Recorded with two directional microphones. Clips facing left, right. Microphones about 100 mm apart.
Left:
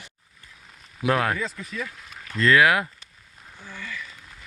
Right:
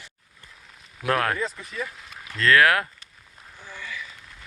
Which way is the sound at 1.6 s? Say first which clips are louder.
Even; 15° right (ahead or behind).